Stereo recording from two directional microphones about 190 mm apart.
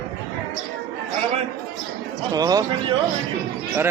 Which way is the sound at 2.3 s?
20° right (ahead or behind).